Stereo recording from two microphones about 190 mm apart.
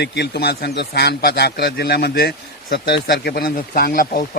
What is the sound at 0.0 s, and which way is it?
A man's voice, 65° left (ahead or behind).